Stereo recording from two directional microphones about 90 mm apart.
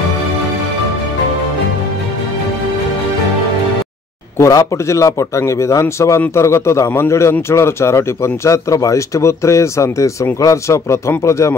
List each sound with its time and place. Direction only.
4.4 s speech: 35° left (ahead or behind)